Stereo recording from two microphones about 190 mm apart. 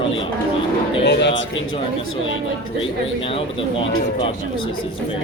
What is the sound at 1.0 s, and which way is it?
Speech, 70° left (ahead or behind).